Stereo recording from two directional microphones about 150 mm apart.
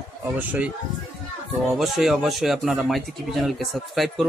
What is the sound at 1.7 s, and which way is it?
Speech, centre (ahead or behind).